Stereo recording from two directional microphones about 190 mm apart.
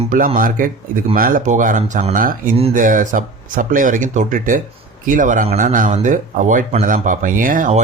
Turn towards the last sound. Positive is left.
turn(degrees=-40)  # may be behind; listen again after turning